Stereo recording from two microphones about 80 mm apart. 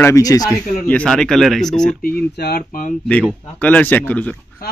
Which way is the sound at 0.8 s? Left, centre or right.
Centre.